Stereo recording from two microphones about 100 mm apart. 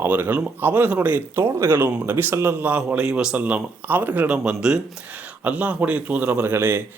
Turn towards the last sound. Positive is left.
turn(degrees=-20)  # may be behind; listen again after turning